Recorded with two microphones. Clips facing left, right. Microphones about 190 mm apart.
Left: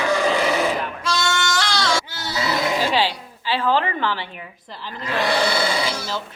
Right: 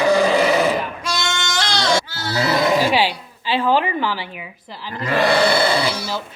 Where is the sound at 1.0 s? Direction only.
15° right (ahead or behind).